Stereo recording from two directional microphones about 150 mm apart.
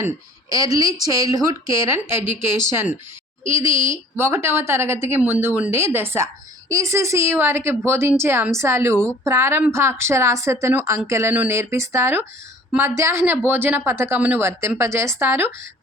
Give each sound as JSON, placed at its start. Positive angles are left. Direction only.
{"t": 0.5, "sound": "a woman's voice", "side_deg": -25}